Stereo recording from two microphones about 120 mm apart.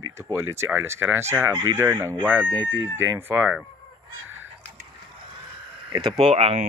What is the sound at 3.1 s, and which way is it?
Speech, 15° right (ahead or behind).